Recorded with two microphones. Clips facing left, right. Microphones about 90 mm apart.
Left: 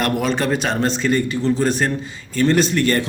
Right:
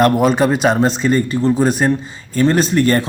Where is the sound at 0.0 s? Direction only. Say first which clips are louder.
Right 7 dB; 45° right (ahead or behind).